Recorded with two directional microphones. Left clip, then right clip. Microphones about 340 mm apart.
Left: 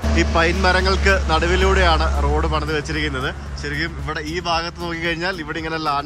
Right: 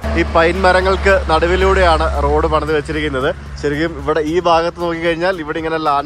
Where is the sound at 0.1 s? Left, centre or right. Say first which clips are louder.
Right 5 dB; centre.